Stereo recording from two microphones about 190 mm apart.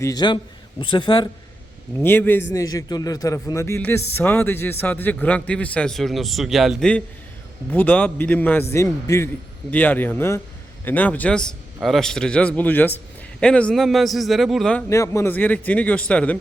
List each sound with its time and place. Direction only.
0.0 s speech: 20° left (ahead or behind)
2.0 s a man's voice: 10° left (ahead or behind)